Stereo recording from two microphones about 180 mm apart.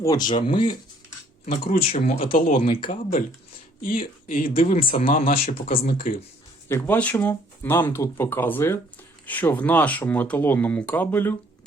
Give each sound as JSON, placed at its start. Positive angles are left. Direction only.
{"t": 0.0, "sound": "speech", "side_deg": 20}
{"t": 1.7, "sound": "speech", "side_deg": 45}
{"t": 6.7, "sound": "speech", "side_deg": 10}